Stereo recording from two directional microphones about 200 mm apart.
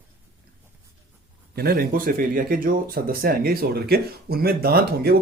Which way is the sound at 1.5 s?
50° right (ahead or behind).